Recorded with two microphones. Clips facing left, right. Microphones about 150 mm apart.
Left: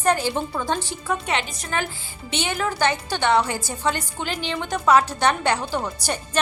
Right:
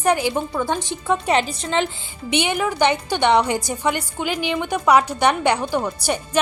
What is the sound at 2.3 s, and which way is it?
A woman's voice, 15° right (ahead or behind).